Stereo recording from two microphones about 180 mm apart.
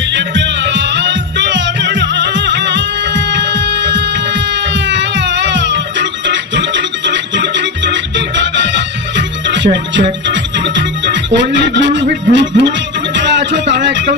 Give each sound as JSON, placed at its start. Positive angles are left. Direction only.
{"t": 0.1, "sound": "music", "side_deg": -80}
{"t": 13.8, "sound": "speech", "side_deg": -70}